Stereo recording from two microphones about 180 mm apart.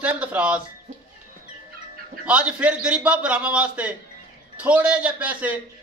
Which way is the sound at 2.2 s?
5° right (ahead or behind).